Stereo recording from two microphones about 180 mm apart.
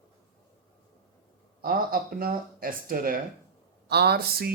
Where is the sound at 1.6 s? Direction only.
55° right (ahead or behind).